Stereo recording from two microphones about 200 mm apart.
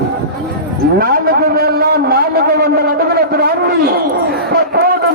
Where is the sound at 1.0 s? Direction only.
50° right (ahead or behind).